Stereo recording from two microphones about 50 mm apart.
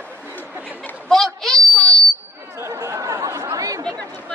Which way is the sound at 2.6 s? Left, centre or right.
Right.